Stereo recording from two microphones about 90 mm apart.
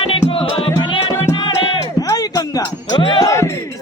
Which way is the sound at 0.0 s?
90° left.